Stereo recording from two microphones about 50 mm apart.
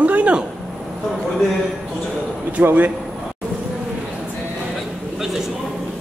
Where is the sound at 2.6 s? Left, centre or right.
Right.